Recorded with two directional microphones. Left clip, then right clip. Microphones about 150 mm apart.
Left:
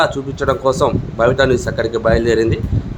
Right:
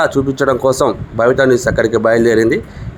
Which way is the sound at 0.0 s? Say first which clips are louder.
Right 3 dB; 40° right (ahead or behind).